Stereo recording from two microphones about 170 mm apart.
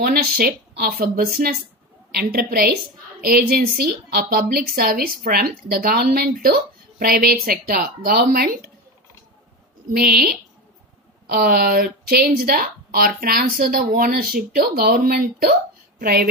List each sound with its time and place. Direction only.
0.0 s a woman's voice: 60° right (ahead or behind)
9.9 s a woman's voice: 65° right (ahead or behind)